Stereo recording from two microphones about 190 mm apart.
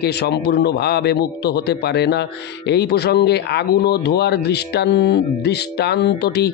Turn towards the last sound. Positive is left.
turn(degrees=60)  # may be behind; listen again after turning